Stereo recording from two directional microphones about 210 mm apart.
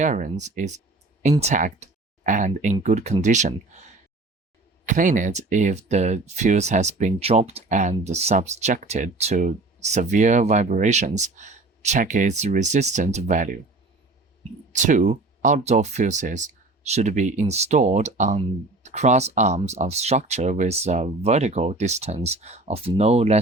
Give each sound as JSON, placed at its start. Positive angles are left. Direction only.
{"t": 0.0, "sound": "speech", "side_deg": -35}
{"t": 4.9, "sound": "speech", "side_deg": -35}
{"t": 14.7, "sound": "speech", "side_deg": -35}